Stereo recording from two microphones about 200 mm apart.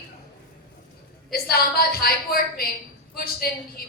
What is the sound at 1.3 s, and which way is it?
A woman's voice, 50° left (ahead or behind).